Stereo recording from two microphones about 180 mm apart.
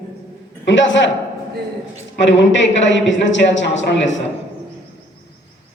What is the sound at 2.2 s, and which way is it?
Speech, 90° left.